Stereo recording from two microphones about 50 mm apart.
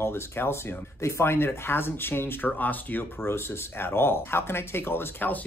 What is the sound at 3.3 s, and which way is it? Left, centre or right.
Speech, left.